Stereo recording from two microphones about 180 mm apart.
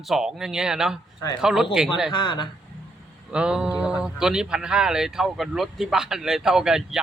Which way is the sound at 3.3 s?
5° right (ahead or behind).